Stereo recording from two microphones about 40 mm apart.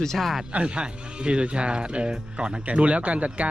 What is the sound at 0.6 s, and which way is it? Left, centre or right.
Speech, right.